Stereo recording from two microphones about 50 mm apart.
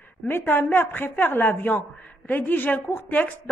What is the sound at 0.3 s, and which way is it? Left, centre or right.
Speech, left.